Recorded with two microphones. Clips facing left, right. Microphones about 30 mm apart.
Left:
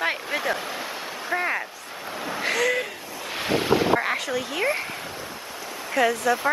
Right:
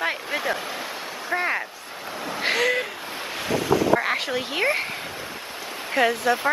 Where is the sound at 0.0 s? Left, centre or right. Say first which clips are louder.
Even; centre.